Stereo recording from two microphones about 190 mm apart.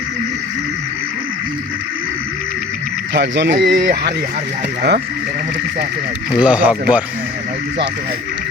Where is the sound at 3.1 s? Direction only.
70° right (ahead or behind).